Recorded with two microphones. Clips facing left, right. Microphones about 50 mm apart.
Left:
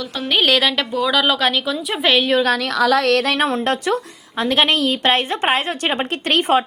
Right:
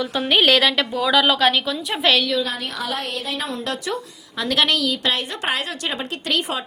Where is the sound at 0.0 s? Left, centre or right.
Centre.